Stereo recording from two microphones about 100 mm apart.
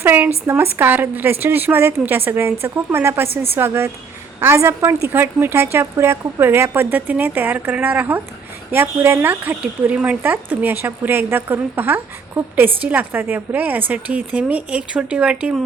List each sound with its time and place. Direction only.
0.0 s a woman's voice: 20° right (ahead or behind)